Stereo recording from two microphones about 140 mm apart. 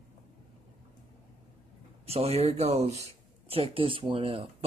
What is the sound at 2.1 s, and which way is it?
Speech, 45° right (ahead or behind).